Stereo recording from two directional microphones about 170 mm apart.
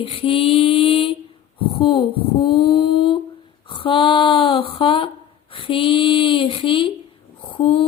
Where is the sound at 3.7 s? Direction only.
30° left (ahead or behind).